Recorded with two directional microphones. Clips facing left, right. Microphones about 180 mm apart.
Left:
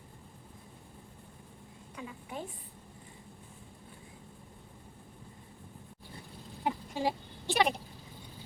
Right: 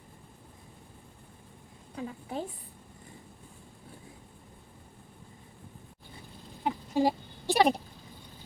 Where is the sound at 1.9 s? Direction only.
35° right (ahead or behind).